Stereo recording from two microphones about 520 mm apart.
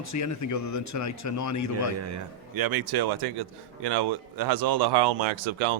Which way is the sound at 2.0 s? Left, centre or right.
Right.